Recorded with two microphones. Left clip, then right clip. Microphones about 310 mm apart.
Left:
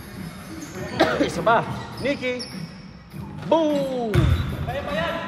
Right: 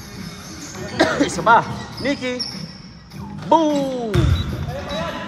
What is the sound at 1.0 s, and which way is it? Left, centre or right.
Speech, right.